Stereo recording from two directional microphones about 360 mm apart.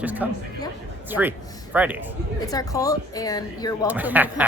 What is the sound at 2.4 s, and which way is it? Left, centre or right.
A woman's voice, centre.